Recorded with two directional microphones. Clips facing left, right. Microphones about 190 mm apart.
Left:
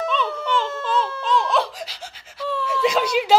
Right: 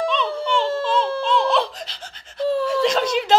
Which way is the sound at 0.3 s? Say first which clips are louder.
Right 3 dB; 30° right (ahead or behind).